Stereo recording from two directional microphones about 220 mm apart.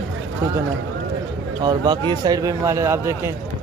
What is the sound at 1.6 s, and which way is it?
A man's voice, 20° right (ahead or behind).